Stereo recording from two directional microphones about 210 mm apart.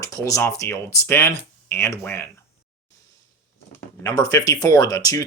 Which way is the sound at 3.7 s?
15° left (ahead or behind).